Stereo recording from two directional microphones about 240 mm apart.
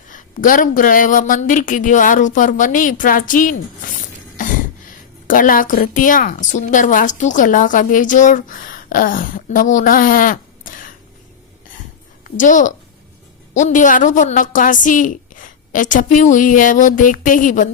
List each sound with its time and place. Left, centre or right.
0.1 s a woman's voice: left
4.4 s a sound: left
5.3 s a woman's voice: left
12.4 s a woman's voice: left